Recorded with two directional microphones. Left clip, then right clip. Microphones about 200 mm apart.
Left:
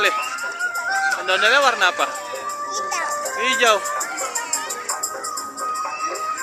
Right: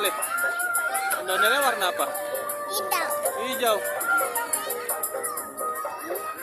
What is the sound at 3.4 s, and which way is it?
Speech, 5° left (ahead or behind).